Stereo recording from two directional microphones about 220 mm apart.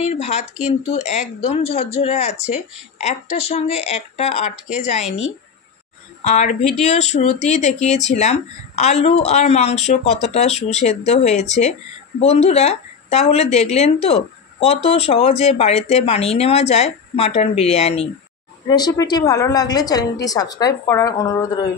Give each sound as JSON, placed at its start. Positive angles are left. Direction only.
{"t": 0.0, "sound": "speech", "side_deg": 30}
{"t": 6.2, "sound": "a woman's voice", "side_deg": 30}